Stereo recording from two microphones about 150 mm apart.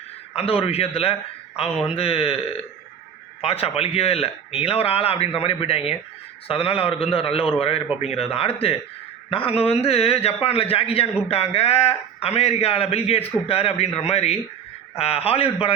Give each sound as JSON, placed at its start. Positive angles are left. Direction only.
{"t": 0.3, "sound": "a man's voice", "side_deg": 40}